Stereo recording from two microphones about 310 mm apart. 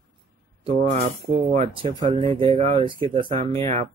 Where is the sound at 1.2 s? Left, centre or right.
Centre.